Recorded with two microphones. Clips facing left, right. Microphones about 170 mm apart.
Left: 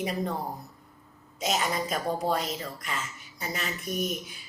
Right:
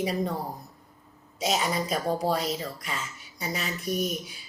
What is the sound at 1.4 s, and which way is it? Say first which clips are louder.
A woman's voice: right 1 dB; centre (ahead or behind).